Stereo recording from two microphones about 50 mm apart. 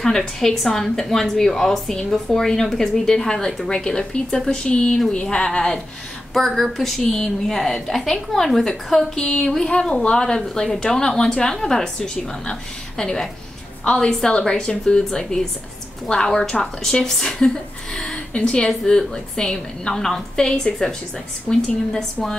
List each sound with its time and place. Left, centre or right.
0.0 s a woman's voice: centre
6.3 s a woman's voice: centre